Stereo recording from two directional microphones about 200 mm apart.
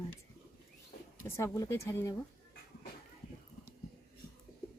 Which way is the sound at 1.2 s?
15° left (ahead or behind).